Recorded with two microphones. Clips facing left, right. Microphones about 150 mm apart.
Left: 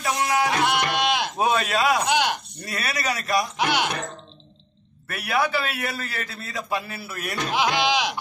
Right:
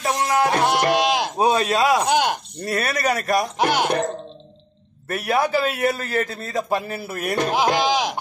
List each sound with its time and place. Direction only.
0.4 s a man's voice: 45° right (ahead or behind)